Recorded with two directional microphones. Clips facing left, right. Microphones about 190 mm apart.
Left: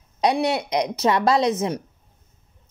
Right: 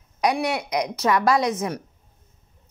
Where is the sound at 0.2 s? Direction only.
25° left (ahead or behind).